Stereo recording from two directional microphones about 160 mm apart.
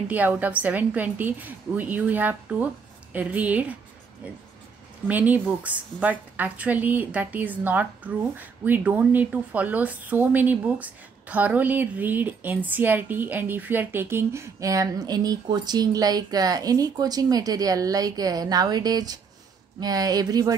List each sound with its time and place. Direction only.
0.1 s a woman's voice: 10° right (ahead or behind)
5.0 s a woman's voice: 10° right (ahead or behind)